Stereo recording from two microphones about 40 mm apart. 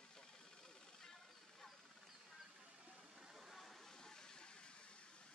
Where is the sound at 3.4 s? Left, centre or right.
Centre.